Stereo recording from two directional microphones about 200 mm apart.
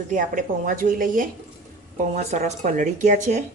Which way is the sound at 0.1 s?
40° right (ahead or behind).